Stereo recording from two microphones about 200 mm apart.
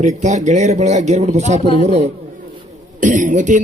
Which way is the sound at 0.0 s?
35° right (ahead or behind).